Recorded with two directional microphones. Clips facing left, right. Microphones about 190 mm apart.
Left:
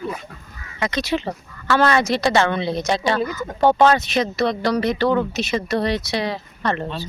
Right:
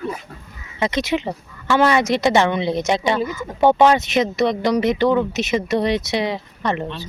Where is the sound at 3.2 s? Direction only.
5° right (ahead or behind).